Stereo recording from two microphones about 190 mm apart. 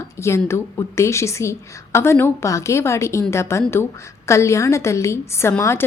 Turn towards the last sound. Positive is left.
turn(degrees=15)  # may be behind; listen again after turning